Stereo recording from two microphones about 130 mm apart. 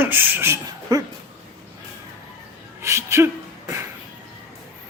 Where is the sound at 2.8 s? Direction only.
20° right (ahead or behind).